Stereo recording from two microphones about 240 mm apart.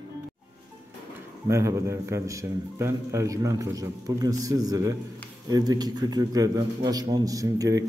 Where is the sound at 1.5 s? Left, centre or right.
Centre.